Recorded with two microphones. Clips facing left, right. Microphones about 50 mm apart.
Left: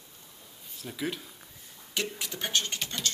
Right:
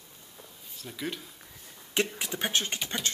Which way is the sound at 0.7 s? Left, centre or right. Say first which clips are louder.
Left 2 dB; centre.